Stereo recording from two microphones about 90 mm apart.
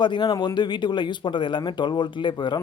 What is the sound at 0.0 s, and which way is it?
A man's voice, 60° left (ahead or behind).